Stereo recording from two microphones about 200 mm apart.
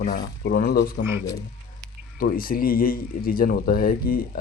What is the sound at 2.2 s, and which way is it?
A man's voice, 45° left (ahead or behind).